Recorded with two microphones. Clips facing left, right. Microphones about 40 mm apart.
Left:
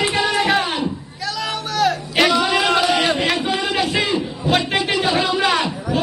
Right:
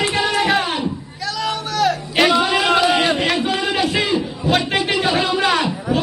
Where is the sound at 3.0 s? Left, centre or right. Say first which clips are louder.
Right 1 dB; centre.